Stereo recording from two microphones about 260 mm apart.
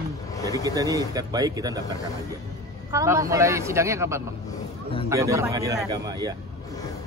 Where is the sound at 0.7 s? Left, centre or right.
Centre.